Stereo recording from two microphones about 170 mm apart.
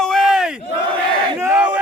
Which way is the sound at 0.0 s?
Centre (ahead or behind).